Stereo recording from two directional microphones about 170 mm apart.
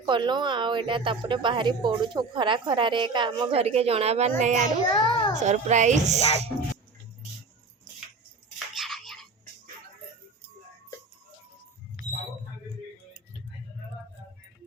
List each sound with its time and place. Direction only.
0.0 s a woman's voice: 25° right (ahead or behind); by 4.7 s 45° right (ahead or behind)
4.9 s a child's voice: 25° left (ahead or behind)
5.4 s speech: 45° right (ahead or behind)
8.5 s a sound: centre (ahead or behind)